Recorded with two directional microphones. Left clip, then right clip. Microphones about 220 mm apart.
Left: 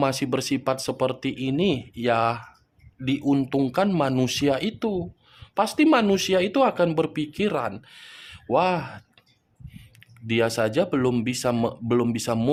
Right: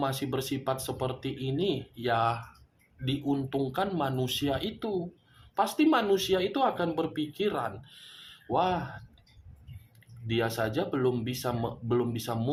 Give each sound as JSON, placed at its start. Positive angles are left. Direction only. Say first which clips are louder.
{"t": 0.0, "sound": "speech", "louder": "left 7 dB", "side_deg": 45}
{"t": 10.2, "sound": "speech", "louder": "left 7 dB", "side_deg": 45}